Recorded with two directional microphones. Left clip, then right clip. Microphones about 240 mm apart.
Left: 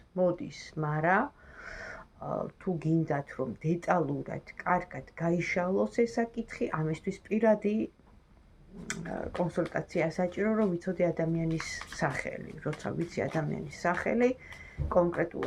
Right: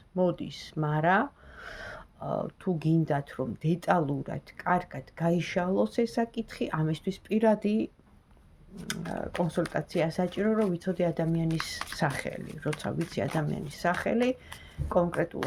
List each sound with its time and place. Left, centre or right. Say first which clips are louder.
0.2 s speech: even; right
8.9 s speech: right 2 dB; right